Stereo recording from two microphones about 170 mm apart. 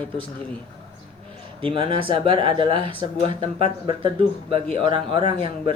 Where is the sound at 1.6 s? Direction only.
30° right (ahead or behind).